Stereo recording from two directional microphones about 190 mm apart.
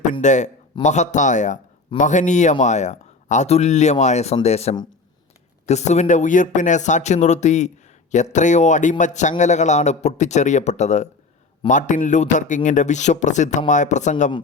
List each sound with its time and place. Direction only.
0.1 s a man's voice: 40° left (ahead or behind)